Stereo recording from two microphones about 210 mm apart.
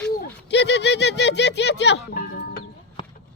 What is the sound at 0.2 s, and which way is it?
Speech, 55° left (ahead or behind).